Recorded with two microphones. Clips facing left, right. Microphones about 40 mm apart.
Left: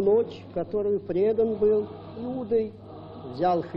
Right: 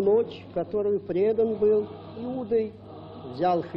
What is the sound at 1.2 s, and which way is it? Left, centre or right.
Speech, centre.